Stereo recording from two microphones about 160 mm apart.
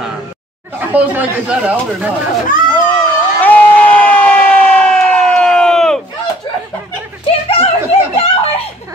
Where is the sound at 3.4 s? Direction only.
10° left (ahead or behind).